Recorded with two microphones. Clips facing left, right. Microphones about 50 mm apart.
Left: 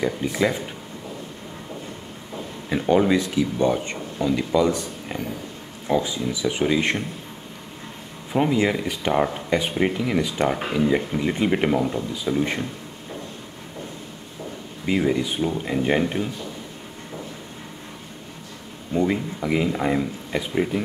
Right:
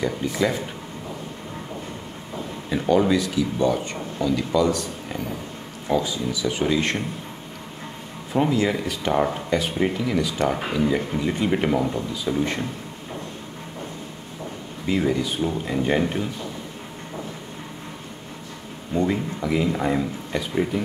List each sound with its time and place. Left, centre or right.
0.0 s speech: centre
2.7 s speech: centre
8.3 s speech: centre
10.5 s speech: centre
14.9 s speech: centre
18.9 s speech: centre